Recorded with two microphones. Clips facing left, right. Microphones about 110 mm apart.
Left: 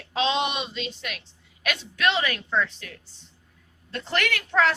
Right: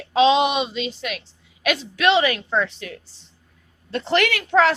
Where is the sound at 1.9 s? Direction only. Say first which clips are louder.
Right 6 dB; 90° right.